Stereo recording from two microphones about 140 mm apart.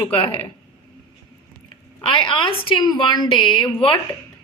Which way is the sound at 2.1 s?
35° left (ahead or behind).